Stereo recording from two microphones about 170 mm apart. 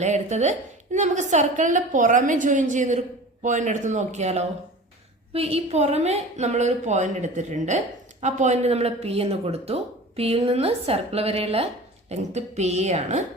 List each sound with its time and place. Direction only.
0.0 s a woman's voice: 45° right (ahead or behind)